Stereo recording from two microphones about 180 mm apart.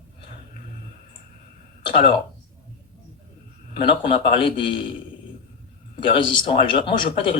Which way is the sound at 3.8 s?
30° left (ahead or behind).